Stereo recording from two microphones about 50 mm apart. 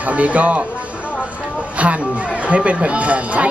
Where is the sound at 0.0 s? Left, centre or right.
Right.